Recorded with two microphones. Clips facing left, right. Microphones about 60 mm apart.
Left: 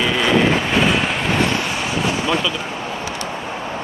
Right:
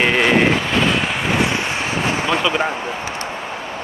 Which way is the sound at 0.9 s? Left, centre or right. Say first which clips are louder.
Left 1 dB; centre.